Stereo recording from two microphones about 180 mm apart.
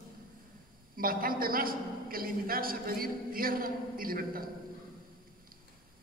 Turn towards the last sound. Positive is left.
turn(degrees=-55)  # may be behind; listen again after turning